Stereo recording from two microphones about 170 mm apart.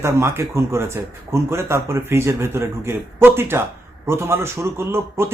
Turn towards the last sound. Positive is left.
turn(degrees=-15)  # may be behind; listen again after turning